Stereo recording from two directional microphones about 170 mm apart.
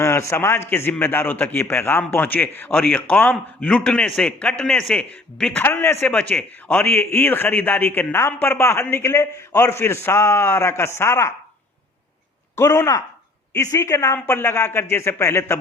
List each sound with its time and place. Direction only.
0.0 s a man's voice: 15° left (ahead or behind)
12.5 s a man's voice: 15° left (ahead or behind)